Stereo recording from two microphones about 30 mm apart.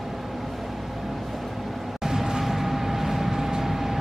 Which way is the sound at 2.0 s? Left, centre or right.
Centre.